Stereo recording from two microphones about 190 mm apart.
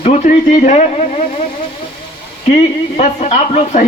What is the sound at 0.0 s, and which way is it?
Speech, 35° left (ahead or behind).